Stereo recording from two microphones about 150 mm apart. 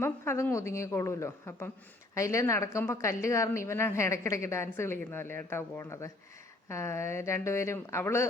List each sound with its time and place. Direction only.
0.0 s a woman's voice: 15° left (ahead or behind)